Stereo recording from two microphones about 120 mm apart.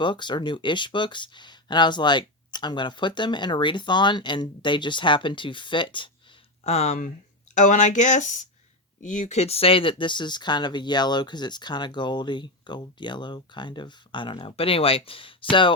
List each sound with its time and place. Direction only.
0.0 s speech: 40° left (ahead or behind)
6.7 s speech: 65° left (ahead or behind); by 15.7 s 45° left (ahead or behind)